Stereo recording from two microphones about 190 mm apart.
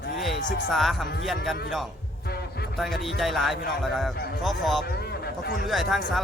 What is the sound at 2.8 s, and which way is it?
Speech, centre (ahead or behind).